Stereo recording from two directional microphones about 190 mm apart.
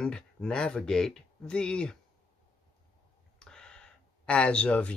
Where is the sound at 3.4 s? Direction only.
5° left (ahead or behind).